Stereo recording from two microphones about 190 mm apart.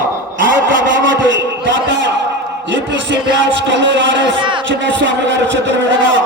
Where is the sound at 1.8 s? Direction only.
75° right (ahead or behind).